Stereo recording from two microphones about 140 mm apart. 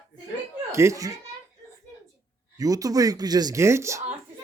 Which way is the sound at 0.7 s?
20° right (ahead or behind).